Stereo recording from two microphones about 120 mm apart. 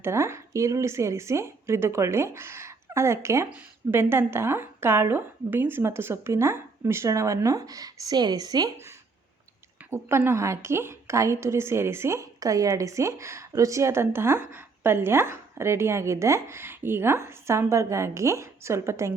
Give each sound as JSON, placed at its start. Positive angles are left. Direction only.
{"t": 0.0, "sound": "a woman's voice", "side_deg": -20}
{"t": 9.9, "sound": "a woman's voice", "side_deg": -20}